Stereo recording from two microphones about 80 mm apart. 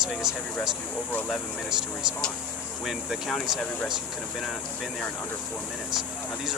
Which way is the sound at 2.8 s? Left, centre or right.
Centre.